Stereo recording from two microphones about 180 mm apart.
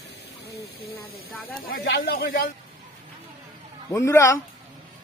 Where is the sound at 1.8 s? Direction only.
60° left (ahead or behind).